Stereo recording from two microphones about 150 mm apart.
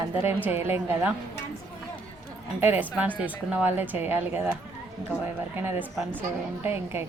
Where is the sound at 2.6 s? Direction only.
10° right (ahead or behind).